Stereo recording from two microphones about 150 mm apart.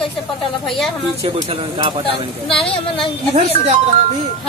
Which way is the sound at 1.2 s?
40° right (ahead or behind).